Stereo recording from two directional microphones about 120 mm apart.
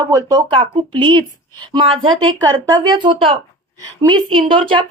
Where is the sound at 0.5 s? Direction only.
45° right (ahead or behind).